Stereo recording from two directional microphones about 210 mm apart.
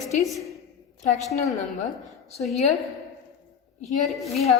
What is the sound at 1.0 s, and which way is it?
Speech, 35° left (ahead or behind).